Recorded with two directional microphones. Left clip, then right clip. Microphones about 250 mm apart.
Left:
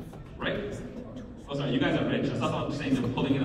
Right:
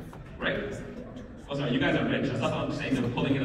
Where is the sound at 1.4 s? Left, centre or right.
Centre.